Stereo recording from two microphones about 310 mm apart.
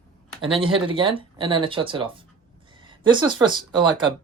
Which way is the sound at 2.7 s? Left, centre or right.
Centre.